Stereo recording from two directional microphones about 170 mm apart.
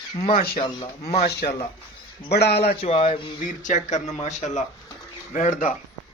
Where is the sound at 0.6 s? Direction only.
35° left (ahead or behind).